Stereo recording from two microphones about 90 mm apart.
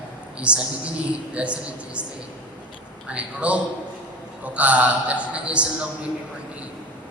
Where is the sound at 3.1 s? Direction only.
15° right (ahead or behind).